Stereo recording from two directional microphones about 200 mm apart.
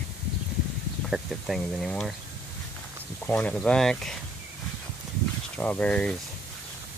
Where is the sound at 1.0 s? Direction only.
Centre (ahead or behind).